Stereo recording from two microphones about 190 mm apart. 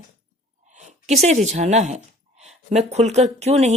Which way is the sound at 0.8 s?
35° right (ahead or behind).